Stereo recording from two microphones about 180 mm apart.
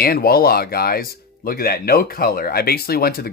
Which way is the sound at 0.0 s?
55° left (ahead or behind).